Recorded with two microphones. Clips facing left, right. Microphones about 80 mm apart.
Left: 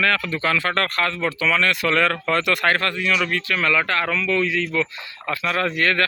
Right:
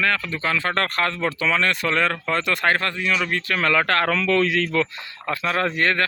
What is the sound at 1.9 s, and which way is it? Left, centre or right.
Speech, centre.